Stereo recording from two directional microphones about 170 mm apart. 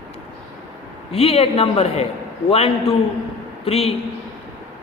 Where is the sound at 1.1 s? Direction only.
35° left (ahead or behind).